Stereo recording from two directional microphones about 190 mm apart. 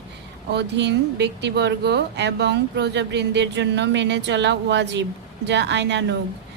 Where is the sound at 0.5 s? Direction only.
65° right (ahead or behind).